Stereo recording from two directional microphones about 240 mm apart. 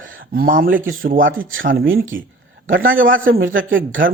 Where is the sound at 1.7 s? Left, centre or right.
Right.